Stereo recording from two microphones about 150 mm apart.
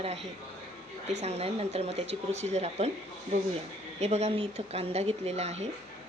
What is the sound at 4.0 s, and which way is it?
Speech, 45° right (ahead or behind).